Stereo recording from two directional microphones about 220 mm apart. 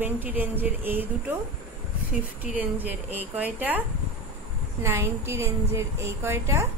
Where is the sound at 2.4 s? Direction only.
5° right (ahead or behind).